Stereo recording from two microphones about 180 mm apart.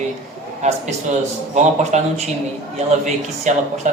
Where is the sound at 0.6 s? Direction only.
40° right (ahead or behind).